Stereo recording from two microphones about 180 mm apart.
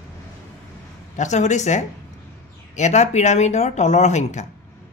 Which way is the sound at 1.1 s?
40° left (ahead or behind).